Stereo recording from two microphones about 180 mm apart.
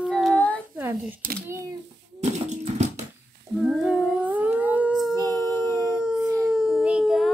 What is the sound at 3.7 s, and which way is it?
Humming, centre (ahead or behind).